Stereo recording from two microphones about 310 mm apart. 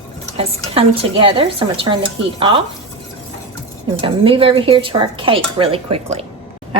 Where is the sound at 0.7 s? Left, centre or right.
Centre.